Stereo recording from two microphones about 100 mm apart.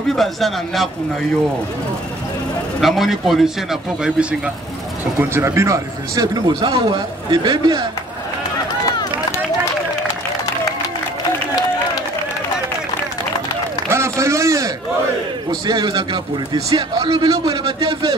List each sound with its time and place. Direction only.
0.1 s a man's voice: centre (ahead or behind)
2.8 s a man's voice: centre (ahead or behind)
5.2 s a man's voice: 25° right (ahead or behind); by 7.8 s 45° right (ahead or behind)
13.8 s a sound: 30° right (ahead or behind)
15.6 s a man's voice: 45° right (ahead or behind)